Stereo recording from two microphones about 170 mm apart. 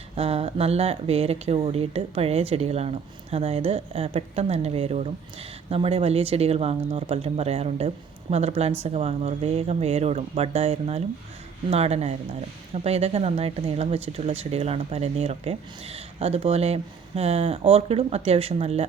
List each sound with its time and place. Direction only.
0.2 s speech: 35° right (ahead or behind)